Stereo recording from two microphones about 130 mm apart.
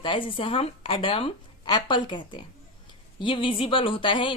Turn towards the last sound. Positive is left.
turn(degrees=40)  # may be behind; listen again after turning